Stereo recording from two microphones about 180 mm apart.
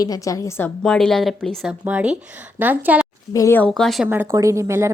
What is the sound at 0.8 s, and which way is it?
A woman's voice, 5° left (ahead or behind).